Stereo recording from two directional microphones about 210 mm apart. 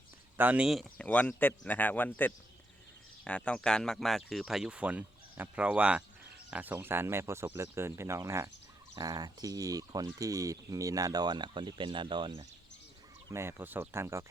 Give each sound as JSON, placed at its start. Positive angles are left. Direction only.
{"t": 0.3, "sound": "speech", "side_deg": -5}